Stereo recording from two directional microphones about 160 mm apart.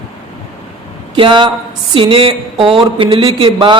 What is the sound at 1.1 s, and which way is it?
A man's voice, 30° right (ahead or behind).